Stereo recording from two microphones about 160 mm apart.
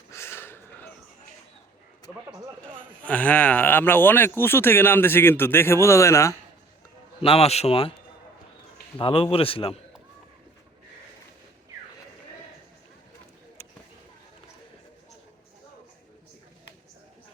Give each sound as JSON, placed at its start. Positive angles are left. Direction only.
{"t": 0.1, "sound": "a sound", "side_deg": 15}
{"t": 2.1, "sound": "a man's voice", "side_deg": -5}
{"t": 3.0, "sound": "speech", "side_deg": 10}
{"t": 7.2, "sound": "a man's voice", "side_deg": 40}
{"t": 9.0, "sound": "a man's voice", "side_deg": 35}